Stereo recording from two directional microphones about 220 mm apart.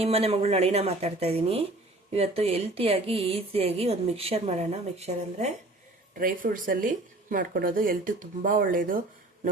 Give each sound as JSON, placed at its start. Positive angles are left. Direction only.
{"t": 0.0, "sound": "speech", "side_deg": -30}